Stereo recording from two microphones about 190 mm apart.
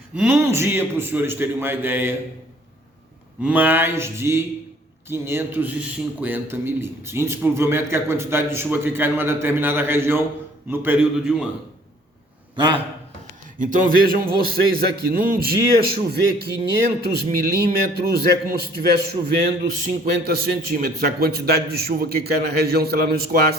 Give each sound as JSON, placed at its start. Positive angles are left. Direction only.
{"t": 0.2, "sound": "a man's voice", "side_deg": -10}
{"t": 3.4, "sound": "a man's voice", "side_deg": -10}
{"t": 12.5, "sound": "a man's voice", "side_deg": -25}
{"t": 13.6, "sound": "a man's voice", "side_deg": -45}